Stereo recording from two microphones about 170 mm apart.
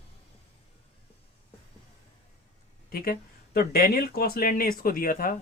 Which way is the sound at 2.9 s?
60° left (ahead or behind).